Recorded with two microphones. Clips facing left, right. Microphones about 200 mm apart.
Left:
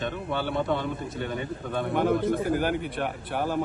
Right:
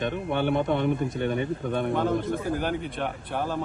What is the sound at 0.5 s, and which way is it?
Speech, 20° right (ahead or behind).